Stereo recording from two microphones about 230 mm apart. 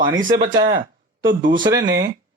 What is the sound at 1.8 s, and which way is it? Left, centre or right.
Speech, right.